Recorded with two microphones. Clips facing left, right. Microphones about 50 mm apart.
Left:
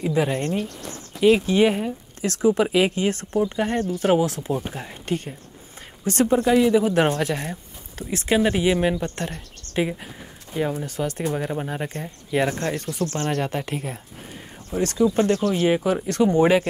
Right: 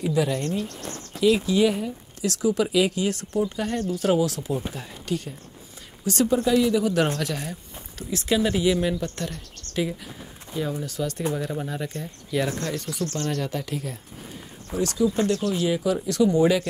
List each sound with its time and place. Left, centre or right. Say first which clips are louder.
0.0 s speech: left 2 dB; left